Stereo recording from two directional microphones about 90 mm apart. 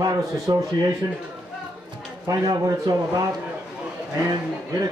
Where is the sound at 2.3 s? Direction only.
40° right (ahead or behind).